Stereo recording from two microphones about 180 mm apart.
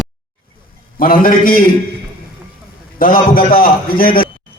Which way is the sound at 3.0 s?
50° left (ahead or behind).